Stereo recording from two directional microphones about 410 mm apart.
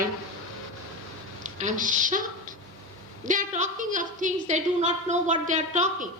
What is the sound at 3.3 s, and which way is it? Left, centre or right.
A woman's voice, centre.